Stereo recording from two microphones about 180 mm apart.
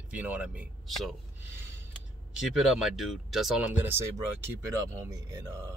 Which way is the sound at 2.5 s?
Centre (ahead or behind).